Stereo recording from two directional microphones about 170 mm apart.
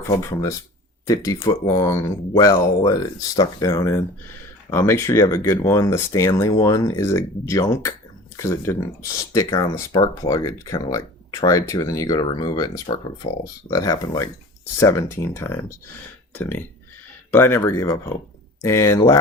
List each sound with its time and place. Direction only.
1.0 s speech: 20° left (ahead or behind)
13.2 s speech: 35° left (ahead or behind)
13.7 s speech: 20° left (ahead or behind)